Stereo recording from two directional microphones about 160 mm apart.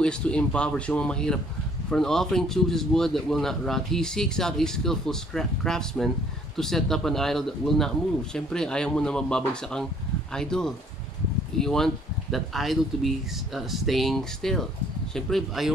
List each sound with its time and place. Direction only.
0.0 s a man's voice: 5° left (ahead or behind)